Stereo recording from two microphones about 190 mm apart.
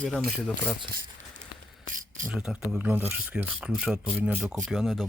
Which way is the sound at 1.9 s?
45° right (ahead or behind).